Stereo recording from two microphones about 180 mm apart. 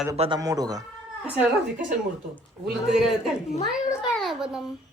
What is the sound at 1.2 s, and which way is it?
A man's voice, 5° right (ahead or behind).